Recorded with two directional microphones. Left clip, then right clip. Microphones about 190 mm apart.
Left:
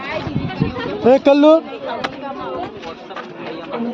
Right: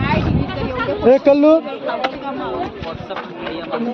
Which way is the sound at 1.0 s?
50° left (ahead or behind).